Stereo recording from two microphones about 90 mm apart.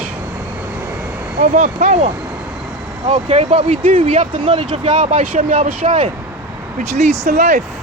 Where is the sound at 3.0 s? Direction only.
70° right (ahead or behind); by 5.6 s 90° right.